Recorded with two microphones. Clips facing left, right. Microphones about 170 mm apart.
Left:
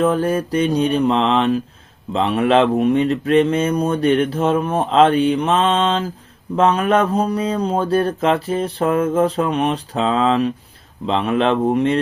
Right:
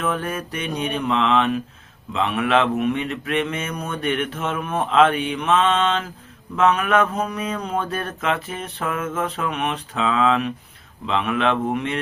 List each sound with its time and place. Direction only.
0.0 s speech: 35° left (ahead or behind)